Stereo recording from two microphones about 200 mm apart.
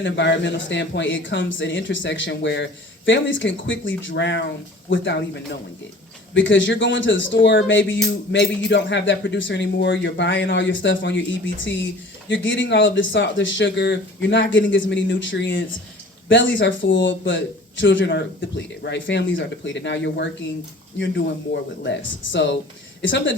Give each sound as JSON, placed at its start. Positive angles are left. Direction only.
{"t": 0.0, "sound": "speech", "side_deg": 65}
{"t": 6.3, "sound": "speech", "side_deg": 70}
{"t": 21.8, "sound": "speech", "side_deg": 65}